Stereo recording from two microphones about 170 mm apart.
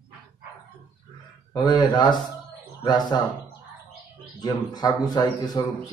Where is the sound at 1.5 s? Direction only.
25° left (ahead or behind).